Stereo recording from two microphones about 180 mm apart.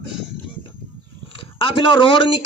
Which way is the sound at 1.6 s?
30° left (ahead or behind).